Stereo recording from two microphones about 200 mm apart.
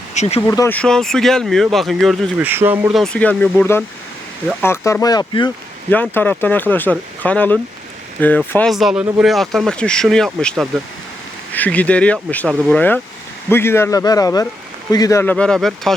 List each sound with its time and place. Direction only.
0.1 s speech: 35° left (ahead or behind)
0.4 s speech: 15° left (ahead or behind)
2.4 s speech: 10° right (ahead or behind)
3.0 s speech: 5° left (ahead or behind); by 5.5 s 20° left (ahead or behind)
5.9 s speech: 10° left (ahead or behind)